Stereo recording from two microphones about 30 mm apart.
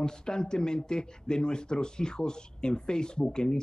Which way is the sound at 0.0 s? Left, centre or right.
Left.